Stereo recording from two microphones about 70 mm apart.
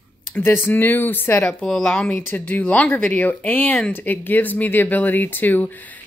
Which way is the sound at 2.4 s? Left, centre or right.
Left.